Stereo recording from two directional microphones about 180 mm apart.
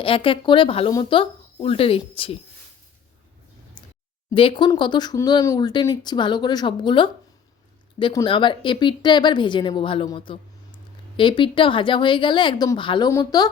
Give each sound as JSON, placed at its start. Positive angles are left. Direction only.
{"t": 0.0, "sound": "speech", "side_deg": 30}
{"t": 3.8, "sound": "a sound", "side_deg": 25}
{"t": 4.4, "sound": "speech", "side_deg": 25}